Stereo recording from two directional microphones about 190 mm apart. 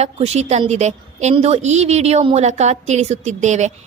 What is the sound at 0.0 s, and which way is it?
A woman's voice, 35° right (ahead or behind).